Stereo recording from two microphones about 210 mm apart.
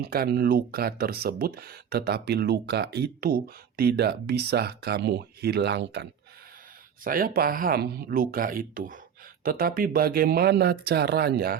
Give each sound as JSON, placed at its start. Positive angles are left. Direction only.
{"t": 0.0, "sound": "speech", "side_deg": -50}
{"t": 7.0, "sound": "speech", "side_deg": -40}